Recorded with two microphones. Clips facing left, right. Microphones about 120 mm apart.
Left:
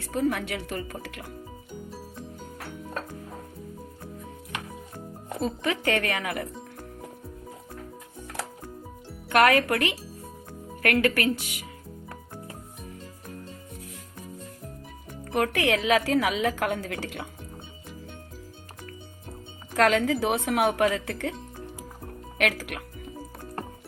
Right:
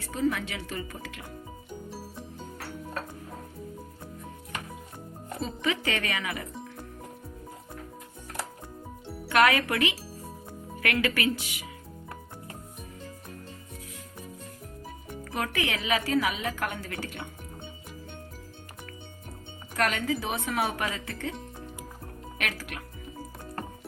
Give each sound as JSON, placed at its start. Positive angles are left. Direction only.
{"t": 0.1, "sound": "speech", "side_deg": 55}
{"t": 1.9, "sound": "music", "side_deg": -5}
{"t": 5.4, "sound": "speech", "side_deg": 55}
{"t": 9.3, "sound": "speech", "side_deg": 50}
{"t": 11.0, "sound": "speech", "side_deg": 45}
{"t": 15.3, "sound": "a woman's voice", "side_deg": 65}
{"t": 19.7, "sound": "speech", "side_deg": 85}
{"t": 22.4, "sound": "speech", "side_deg": 75}